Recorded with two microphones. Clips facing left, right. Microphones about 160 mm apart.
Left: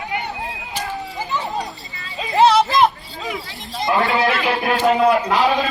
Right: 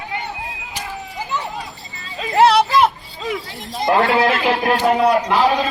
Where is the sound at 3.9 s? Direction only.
55° right (ahead or behind).